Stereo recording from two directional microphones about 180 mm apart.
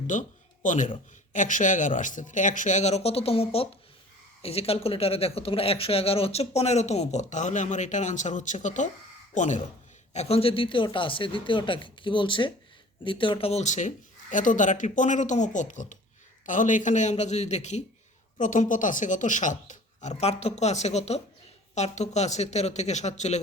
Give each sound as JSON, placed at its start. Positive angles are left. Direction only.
{"t": 0.1, "sound": "speech", "side_deg": 45}